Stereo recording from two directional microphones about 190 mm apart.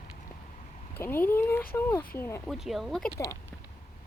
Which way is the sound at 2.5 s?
Centre (ahead or behind).